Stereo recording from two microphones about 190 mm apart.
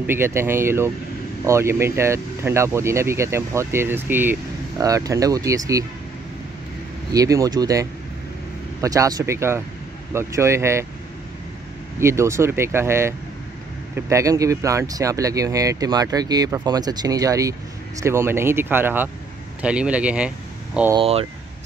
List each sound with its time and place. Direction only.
0.0 s speech: 10° right (ahead or behind)
7.1 s speech: 15° right (ahead or behind)
12.0 s speech: 15° right (ahead or behind)
20.9 s speech: 30° right (ahead or behind)